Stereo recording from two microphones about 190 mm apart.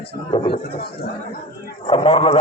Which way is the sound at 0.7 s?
55° left (ahead or behind).